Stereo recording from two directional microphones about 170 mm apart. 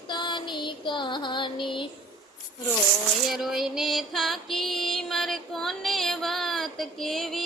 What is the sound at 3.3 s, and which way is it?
Music, centre (ahead or behind).